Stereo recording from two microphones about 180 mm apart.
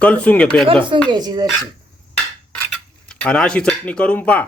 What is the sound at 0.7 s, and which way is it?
Speech, 30° right (ahead or behind).